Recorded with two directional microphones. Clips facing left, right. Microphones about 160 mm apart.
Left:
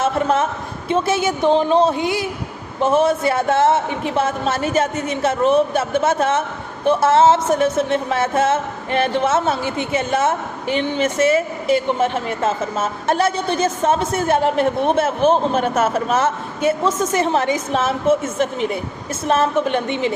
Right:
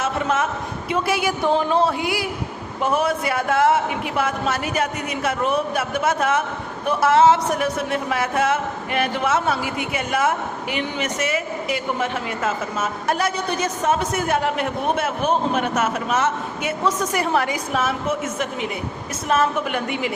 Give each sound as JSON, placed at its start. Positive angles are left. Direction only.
{"t": 0.0, "sound": "a woman's voice", "side_deg": 30}